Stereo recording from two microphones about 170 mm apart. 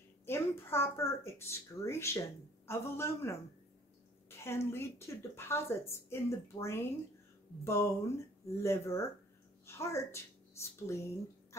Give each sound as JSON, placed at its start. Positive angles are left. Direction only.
{"t": 0.3, "sound": "a woman's voice", "side_deg": 15}